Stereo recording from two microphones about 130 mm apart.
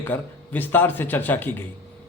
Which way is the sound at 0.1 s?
15° left (ahead or behind).